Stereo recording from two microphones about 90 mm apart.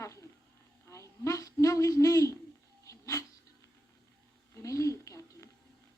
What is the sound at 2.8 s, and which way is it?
Dog, 35° left (ahead or behind).